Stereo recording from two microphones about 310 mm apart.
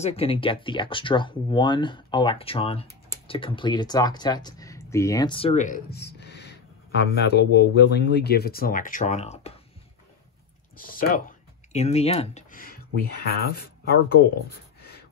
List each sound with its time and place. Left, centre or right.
0.0 s speech: centre
10.8 s speech: left